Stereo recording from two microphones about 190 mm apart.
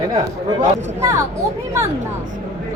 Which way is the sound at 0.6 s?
15° right (ahead or behind).